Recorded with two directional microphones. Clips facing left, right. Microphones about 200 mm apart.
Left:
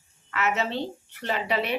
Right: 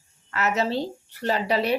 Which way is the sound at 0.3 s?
40° right (ahead or behind).